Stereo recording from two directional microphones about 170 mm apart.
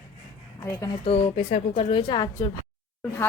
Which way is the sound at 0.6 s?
15° left (ahead or behind).